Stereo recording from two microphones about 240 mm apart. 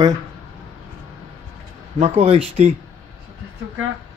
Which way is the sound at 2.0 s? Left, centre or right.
Right.